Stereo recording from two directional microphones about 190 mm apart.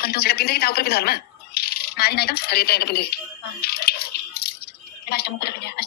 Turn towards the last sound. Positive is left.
turn(degrees=55)  # may be behind; listen again after turning